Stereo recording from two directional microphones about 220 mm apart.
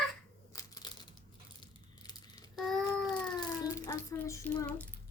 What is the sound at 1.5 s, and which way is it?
Crumpling, 20° left (ahead or behind).